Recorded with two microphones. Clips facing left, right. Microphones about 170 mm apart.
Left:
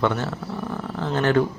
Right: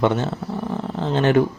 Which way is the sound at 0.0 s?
20° right (ahead or behind).